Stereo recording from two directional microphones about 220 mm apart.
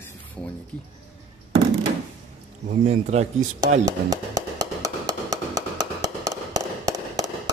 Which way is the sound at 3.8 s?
15° right (ahead or behind).